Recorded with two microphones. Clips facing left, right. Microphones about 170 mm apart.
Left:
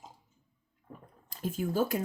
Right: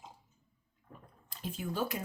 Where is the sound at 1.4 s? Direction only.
45° left (ahead or behind).